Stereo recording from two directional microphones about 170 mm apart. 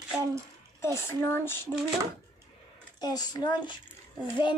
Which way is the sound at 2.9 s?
25° left (ahead or behind).